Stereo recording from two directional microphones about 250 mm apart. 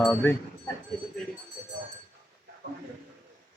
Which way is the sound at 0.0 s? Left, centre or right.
Centre.